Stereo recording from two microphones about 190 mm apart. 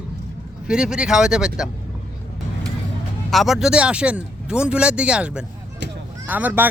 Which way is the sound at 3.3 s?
Centre (ahead or behind).